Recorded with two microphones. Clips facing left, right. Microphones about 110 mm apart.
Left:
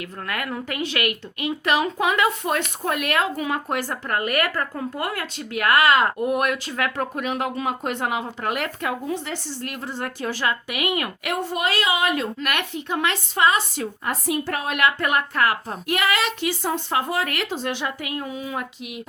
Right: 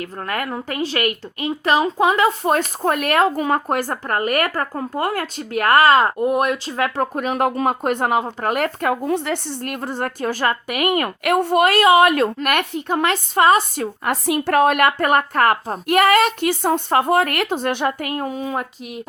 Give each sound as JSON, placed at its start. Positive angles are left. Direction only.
{"t": 0.0, "sound": "speech", "side_deg": -40}
{"t": 14.1, "sound": "speech", "side_deg": -65}